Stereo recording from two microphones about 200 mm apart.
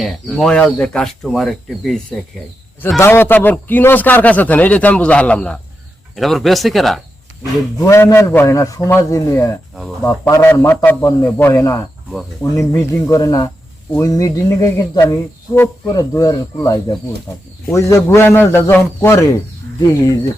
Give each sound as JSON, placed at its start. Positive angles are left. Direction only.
{"t": 0.0, "sound": "speech", "side_deg": 0}
{"t": 7.8, "sound": "speech", "side_deg": 15}